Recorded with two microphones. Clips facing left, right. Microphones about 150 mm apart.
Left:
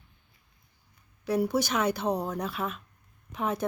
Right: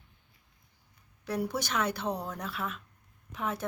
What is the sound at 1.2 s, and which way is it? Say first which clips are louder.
A woman's voice: left 6 dB; 10° left (ahead or behind).